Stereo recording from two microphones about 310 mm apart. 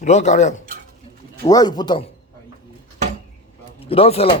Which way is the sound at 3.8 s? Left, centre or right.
Centre.